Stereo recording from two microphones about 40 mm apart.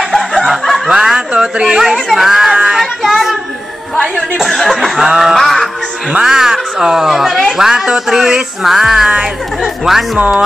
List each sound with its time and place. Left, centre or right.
0.8 s a sound: centre
1.7 s speech: centre
2.8 s child singing: centre
4.0 s speech: centre
5.0 s speech: centre
5.3 s music: centre
6.2 s speech: centre
10.1 s music: right